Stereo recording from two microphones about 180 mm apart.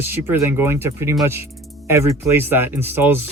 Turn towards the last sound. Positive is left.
turn(degrees=-10)  # may be behind; listen again after turning